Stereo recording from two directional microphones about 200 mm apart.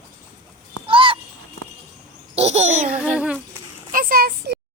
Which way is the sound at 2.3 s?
35° right (ahead or behind).